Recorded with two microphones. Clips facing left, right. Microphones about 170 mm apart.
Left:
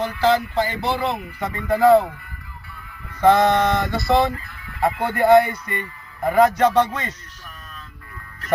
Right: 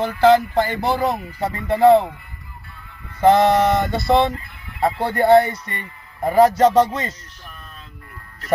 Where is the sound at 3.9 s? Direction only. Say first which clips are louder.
Right 2 dB; 25° right (ahead or behind).